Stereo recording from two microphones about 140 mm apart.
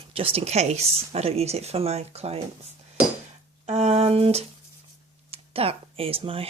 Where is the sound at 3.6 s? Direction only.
50° right (ahead or behind).